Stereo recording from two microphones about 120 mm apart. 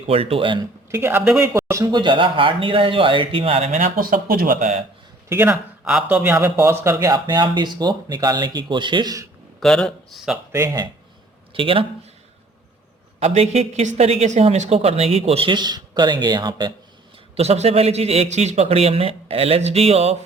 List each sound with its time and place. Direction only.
0.1 s speech: 50° right (ahead or behind)
0.9 s speech: 20° right (ahead or behind)
1.9 s speech: 40° right (ahead or behind)
3.7 s speech: 90° right
5.3 s speech: 20° right (ahead or behind)
5.8 s speech: 5° right (ahead or behind)
6.2 s speech: 20° right (ahead or behind)
7.1 s speech: 40° right (ahead or behind)
9.6 s speech: 5° left (ahead or behind)
10.5 s speech: 25° right (ahead or behind)
11.5 s speech: 50° right (ahead or behind)
13.1 s a man's voice: 60° right (ahead or behind)
15.4 s speech: 35° right (ahead or behind)
17.3 s a man's voice: 60° right (ahead or behind)